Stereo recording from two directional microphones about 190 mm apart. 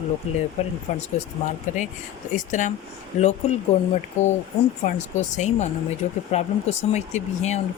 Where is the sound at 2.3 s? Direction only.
40° left (ahead or behind).